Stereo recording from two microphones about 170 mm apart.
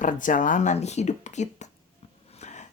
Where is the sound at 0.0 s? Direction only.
50° left (ahead or behind).